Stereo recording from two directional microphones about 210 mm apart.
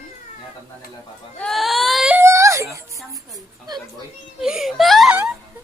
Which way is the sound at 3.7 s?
20° right (ahead or behind).